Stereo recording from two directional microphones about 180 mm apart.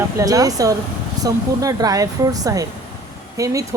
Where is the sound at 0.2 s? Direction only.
20° right (ahead or behind).